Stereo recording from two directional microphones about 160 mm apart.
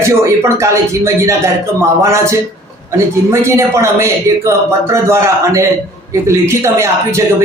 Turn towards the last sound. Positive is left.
turn(degrees=-20)  # may be behind; listen again after turning